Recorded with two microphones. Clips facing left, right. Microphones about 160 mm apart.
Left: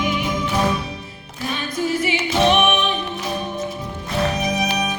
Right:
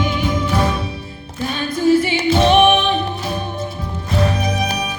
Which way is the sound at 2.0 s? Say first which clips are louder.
Right 3 dB; 30° right (ahead or behind).